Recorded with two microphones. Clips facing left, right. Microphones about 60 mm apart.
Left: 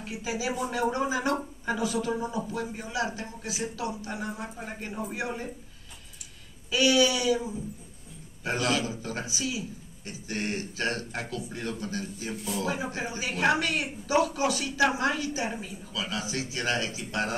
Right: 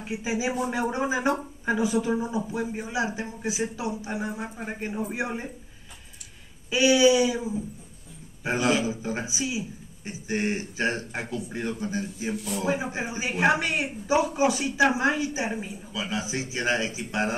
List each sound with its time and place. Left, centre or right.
0.0 s speech: right
6.7 s speech: right